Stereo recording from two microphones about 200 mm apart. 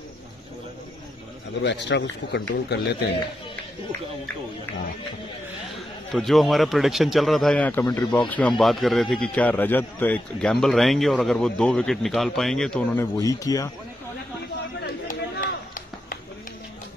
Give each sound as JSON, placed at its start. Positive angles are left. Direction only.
{"t": 1.6, "sound": "speech", "side_deg": 60}
{"t": 6.1, "sound": "speech", "side_deg": 0}
{"t": 14.8, "sound": "a sound", "side_deg": 50}